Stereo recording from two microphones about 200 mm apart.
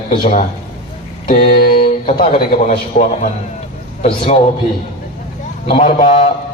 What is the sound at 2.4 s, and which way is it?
Speech, 50° left (ahead or behind).